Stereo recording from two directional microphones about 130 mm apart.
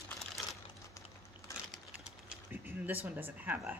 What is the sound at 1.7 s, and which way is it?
Pigeon, 5° right (ahead or behind).